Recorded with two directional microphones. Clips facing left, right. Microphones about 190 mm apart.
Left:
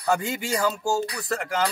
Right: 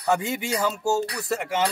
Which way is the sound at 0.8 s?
25° right (ahead or behind).